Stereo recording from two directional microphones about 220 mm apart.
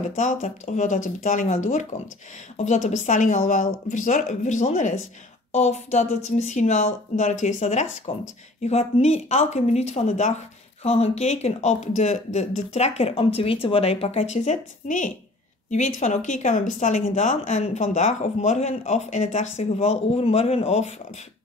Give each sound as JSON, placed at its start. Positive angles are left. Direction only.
{"t": 0.1, "sound": "speech", "side_deg": 35}